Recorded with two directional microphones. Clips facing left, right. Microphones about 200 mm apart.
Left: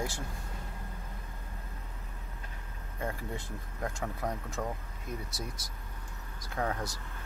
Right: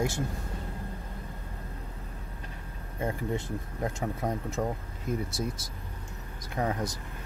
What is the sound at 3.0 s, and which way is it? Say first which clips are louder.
Speech: right 6 dB; 25° right (ahead or behind).